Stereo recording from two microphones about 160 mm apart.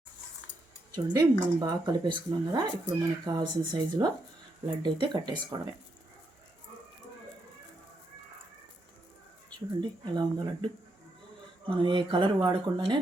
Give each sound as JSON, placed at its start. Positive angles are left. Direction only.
{"t": 0.9, "sound": "speech", "side_deg": -25}
{"t": 9.8, "sound": "speech", "side_deg": -25}
{"t": 11.7, "sound": "speech", "side_deg": -30}